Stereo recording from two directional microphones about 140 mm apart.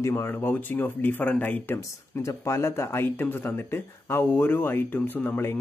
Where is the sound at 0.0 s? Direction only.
20° left (ahead or behind).